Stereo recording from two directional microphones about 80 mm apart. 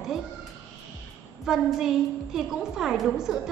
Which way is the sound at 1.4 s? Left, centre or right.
Centre.